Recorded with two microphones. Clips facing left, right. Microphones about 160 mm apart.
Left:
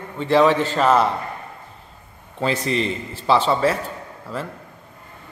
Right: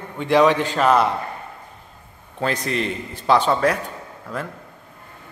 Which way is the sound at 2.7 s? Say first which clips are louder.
Left 2 dB; centre (ahead or behind).